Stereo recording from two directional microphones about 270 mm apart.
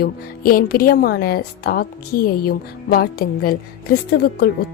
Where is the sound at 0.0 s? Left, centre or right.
Left.